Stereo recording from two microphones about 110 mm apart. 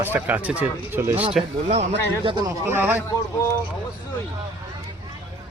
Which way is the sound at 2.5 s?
20° right (ahead or behind).